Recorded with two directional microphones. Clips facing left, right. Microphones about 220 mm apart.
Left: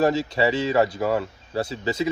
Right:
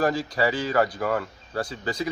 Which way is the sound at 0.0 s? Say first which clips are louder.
Left 3 dB; 25° left (ahead or behind).